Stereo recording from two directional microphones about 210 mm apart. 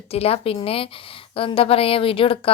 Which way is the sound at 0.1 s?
30° left (ahead or behind).